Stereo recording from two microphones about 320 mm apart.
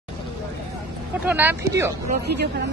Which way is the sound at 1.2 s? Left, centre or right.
Centre.